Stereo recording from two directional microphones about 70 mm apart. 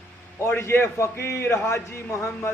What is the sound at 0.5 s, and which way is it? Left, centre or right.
A man's voice, left.